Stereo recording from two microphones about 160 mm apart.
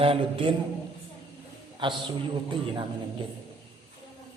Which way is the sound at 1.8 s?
30° right (ahead or behind).